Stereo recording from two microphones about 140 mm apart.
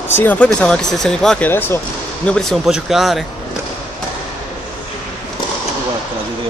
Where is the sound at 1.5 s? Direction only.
15° left (ahead or behind); by 3.2 s centre (ahead or behind).